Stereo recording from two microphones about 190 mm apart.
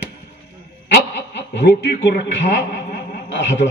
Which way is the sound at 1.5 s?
65° left (ahead or behind).